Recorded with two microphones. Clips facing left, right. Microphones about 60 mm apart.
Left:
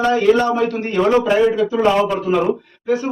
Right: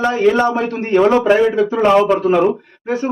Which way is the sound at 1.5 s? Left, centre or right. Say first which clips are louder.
Right 3 dB; right.